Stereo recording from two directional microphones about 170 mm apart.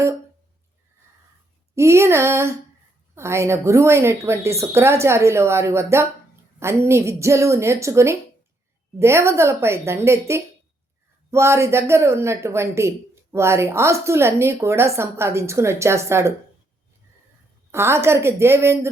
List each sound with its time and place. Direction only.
1.7 s a woman's voice: 15° right (ahead or behind)
17.7 s a woman's voice: 15° right (ahead or behind)